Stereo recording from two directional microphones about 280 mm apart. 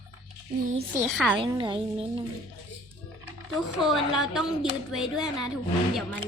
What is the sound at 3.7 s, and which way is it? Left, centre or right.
Speech, centre.